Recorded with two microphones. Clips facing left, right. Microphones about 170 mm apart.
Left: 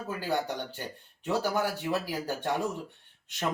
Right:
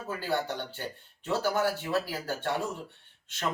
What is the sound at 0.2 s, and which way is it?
Speech, 15° left (ahead or behind).